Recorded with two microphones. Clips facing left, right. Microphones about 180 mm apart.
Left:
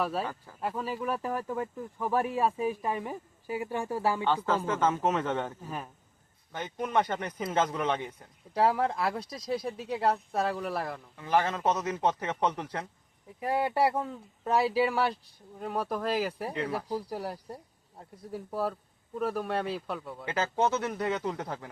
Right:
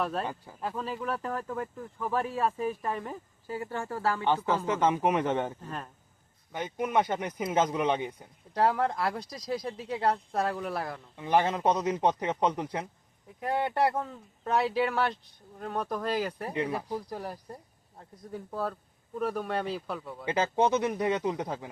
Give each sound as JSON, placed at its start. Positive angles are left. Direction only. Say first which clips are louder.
{"t": 0.0, "sound": "speech", "louder": "even", "side_deg": 5}
{"t": 4.4, "sound": "speech", "louder": "right 1 dB", "side_deg": -15}
{"t": 5.6, "sound": "speech", "louder": "left 1 dB", "side_deg": 10}
{"t": 6.5, "sound": "speech", "louder": "right 1 dB", "side_deg": -10}
{"t": 8.5, "sound": "speech", "louder": "even", "side_deg": 5}
{"t": 11.2, "sound": "speech", "louder": "right 2 dB", "side_deg": -20}
{"t": 13.4, "sound": "speech", "louder": "left 1 dB", "side_deg": 5}
{"t": 16.5, "sound": "speech", "louder": "right 2 dB", "side_deg": -10}
{"t": 16.7, "sound": "speech", "louder": "left 1 dB", "side_deg": 5}
{"t": 20.2, "sound": "speech", "louder": "right 2 dB", "side_deg": -15}